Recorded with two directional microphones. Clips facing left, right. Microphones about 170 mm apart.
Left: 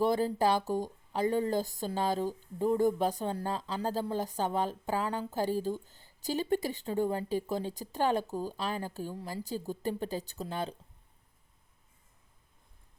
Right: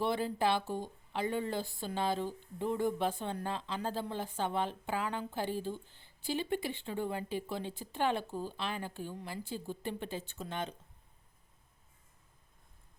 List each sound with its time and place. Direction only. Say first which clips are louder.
0.0 s a woman's voice: left 4 dB; 40° left (ahead or behind)